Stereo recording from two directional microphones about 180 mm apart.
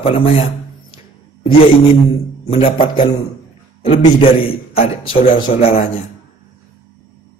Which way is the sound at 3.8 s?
30° left (ahead or behind).